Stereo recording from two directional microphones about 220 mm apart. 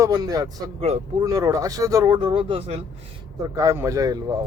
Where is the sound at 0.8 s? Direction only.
30° right (ahead or behind).